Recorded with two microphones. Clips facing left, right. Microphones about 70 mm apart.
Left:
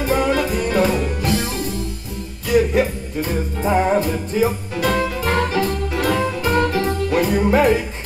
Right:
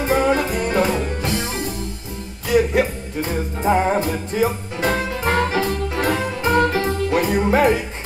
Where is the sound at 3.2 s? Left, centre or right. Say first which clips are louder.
Left 1 dB; right.